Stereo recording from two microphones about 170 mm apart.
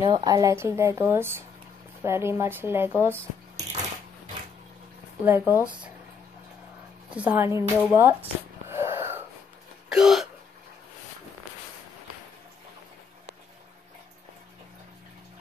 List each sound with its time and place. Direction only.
0.1 s speech: 20° right (ahead or behind)
5.2 s speech: 10° right (ahead or behind)
7.1 s speech: 10° right (ahead or behind)
7.9 s wheeze: 15° right (ahead or behind)
9.8 s hiccup: 5° right (ahead or behind)